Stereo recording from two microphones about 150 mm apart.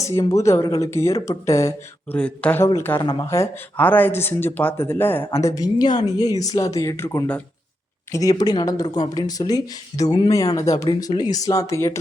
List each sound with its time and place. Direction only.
0.0 s speech: 20° left (ahead or behind)
2.1 s speech: 10° left (ahead or behind)
3.0 s speech: 30° left (ahead or behind)